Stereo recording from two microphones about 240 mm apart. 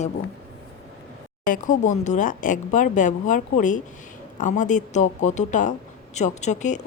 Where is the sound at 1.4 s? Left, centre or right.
Left.